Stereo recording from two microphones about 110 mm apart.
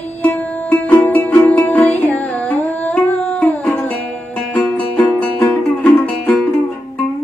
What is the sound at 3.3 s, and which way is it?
Music, 10° left (ahead or behind).